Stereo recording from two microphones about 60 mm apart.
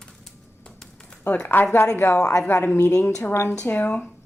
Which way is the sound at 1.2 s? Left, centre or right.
Left.